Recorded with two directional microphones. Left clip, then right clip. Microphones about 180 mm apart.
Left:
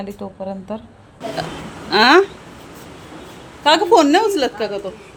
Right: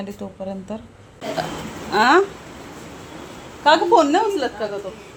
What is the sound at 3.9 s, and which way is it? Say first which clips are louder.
Speech: left 3 dB; 25° left (ahead or behind).